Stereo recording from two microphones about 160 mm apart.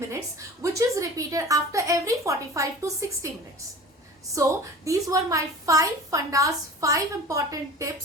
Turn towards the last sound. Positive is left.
turn(degrees=-20)  # may be behind; listen again after turning